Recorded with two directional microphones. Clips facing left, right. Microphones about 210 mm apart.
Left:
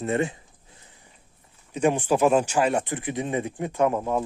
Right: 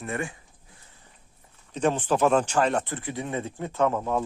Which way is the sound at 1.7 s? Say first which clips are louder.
Left 2 dB; 10° left (ahead or behind).